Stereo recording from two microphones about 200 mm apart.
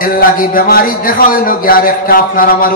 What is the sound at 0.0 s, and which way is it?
A man's voice, 45° left (ahead or behind).